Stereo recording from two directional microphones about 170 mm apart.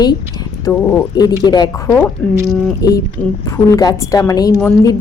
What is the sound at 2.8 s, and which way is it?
Speech, 20° left (ahead or behind).